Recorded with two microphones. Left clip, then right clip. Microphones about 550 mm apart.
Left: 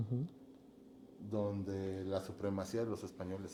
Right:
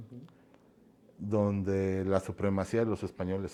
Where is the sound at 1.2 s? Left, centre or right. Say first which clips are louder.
Right 9 dB; right.